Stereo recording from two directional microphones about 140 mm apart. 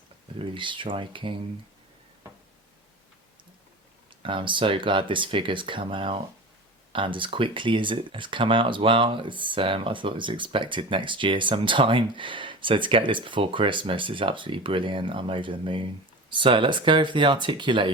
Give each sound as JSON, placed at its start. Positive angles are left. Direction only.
{"t": 0.3, "sound": "speech", "side_deg": -35}
{"t": 4.2, "sound": "speech", "side_deg": -35}